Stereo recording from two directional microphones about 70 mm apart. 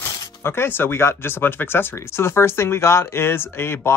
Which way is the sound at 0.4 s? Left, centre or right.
Left.